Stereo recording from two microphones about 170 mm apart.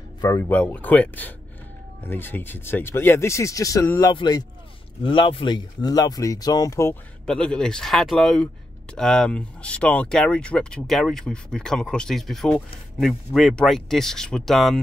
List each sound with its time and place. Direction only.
0.2 s speech: 15° left (ahead or behind)
7.2 s speech: 5° left (ahead or behind)